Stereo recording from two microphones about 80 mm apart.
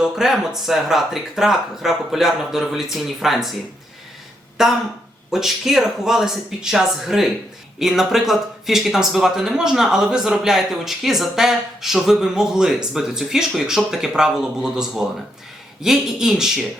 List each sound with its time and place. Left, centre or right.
0.0 s speech: centre
4.6 s speech: centre